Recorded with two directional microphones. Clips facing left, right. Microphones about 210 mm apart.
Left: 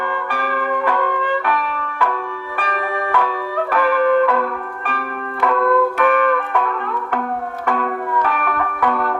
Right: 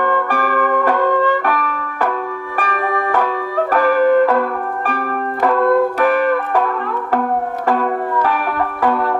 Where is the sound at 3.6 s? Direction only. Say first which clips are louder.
Right 3 dB; 40° right (ahead or behind).